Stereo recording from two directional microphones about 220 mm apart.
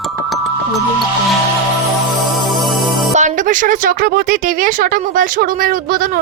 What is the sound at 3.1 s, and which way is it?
Speech, 35° right (ahead or behind).